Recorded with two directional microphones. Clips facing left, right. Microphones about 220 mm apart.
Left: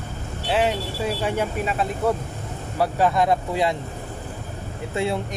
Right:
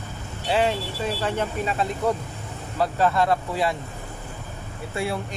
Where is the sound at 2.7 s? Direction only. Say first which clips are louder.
Left 1 dB; 10° left (ahead or behind).